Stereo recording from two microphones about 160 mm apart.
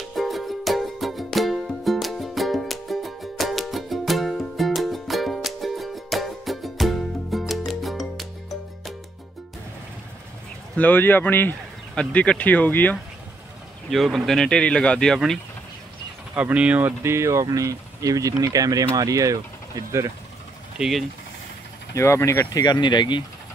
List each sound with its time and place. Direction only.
0.1 s music: centre (ahead or behind)
10.8 s a man's voice: 10° left (ahead or behind)
13.8 s speech: centre (ahead or behind)
16.3 s speech: 10° right (ahead or behind)
20.7 s speech: 5° right (ahead or behind)
21.9 s speech: 15° left (ahead or behind)